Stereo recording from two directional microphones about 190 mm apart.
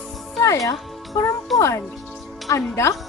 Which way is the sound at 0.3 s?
15° left (ahead or behind).